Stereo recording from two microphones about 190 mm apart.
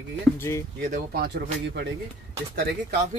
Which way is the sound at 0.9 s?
50° right (ahead or behind).